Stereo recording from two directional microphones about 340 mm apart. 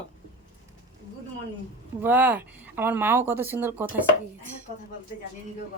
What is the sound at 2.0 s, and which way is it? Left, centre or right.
Speech, centre.